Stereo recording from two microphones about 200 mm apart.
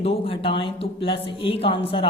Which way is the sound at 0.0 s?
25° left (ahead or behind).